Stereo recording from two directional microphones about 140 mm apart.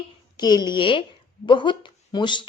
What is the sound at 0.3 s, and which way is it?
Speech, 30° left (ahead or behind).